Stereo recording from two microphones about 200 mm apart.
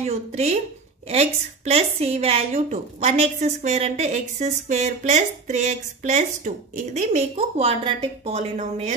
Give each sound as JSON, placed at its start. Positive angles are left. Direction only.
{"t": 0.0, "sound": "a woman's voice", "side_deg": -35}